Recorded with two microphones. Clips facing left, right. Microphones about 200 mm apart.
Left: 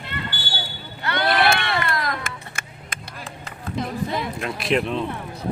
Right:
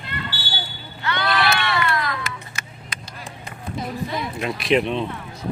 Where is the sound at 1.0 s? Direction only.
50° left (ahead or behind).